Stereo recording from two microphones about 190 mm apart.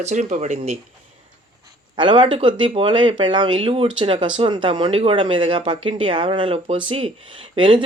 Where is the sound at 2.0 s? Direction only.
25° right (ahead or behind).